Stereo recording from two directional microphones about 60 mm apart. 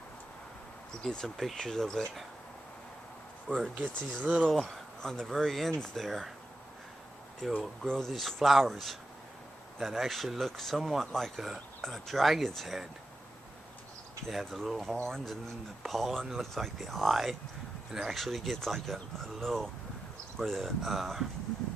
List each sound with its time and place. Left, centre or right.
1.0 s speech: centre
3.8 s speech: right
4.4 s speech: centre
7.4 s speech: centre
14.3 s speech: centre